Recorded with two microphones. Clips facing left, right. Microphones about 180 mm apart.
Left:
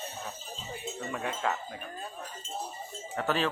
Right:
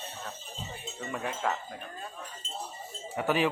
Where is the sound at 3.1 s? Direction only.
15° right (ahead or behind).